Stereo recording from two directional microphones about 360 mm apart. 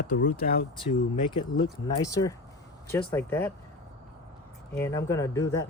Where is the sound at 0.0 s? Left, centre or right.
Left.